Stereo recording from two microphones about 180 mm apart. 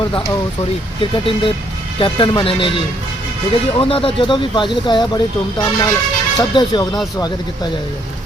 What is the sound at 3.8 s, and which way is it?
Speech, 30° left (ahead or behind).